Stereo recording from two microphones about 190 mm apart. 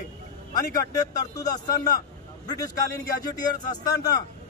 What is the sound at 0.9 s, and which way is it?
A man's voice, 20° left (ahead or behind).